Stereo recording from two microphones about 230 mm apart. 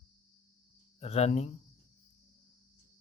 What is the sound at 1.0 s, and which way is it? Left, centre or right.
Speech, left.